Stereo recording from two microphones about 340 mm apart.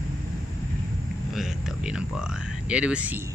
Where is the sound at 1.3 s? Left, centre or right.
Centre.